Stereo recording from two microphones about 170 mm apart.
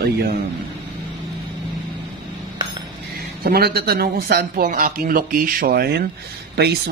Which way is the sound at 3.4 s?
65° right (ahead or behind).